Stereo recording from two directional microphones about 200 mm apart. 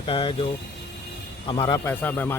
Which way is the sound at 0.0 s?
25° left (ahead or behind).